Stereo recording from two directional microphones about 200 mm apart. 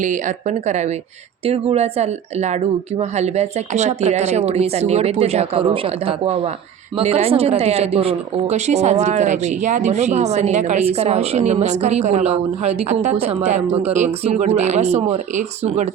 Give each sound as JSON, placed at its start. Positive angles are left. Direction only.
{"t": 0.0, "sound": "speech", "side_deg": -40}